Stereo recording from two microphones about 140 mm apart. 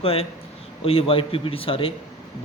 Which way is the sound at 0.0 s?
45° left (ahead or behind).